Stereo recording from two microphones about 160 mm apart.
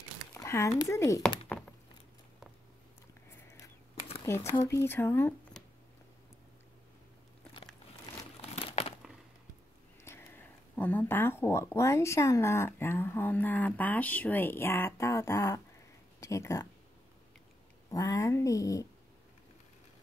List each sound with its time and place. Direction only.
0.3 s speech: 15° left (ahead or behind)
4.3 s speech: 15° left (ahead or behind)
8.4 s crumpling: 40° left (ahead or behind)
10.0 s speech: 15° left (ahead or behind)
17.8 s cat: 20° left (ahead or behind)